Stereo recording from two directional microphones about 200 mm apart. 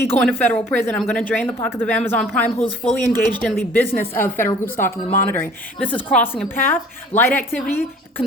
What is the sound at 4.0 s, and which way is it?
Speech, 10° left (ahead or behind).